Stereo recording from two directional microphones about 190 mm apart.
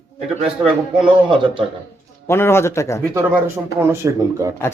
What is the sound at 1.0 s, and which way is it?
Speech, 25° right (ahead or behind).